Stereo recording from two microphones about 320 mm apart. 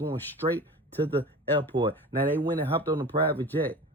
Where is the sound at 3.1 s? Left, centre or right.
Right.